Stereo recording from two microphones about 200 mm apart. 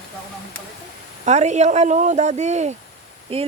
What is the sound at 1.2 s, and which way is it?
Speech, 35° right (ahead or behind).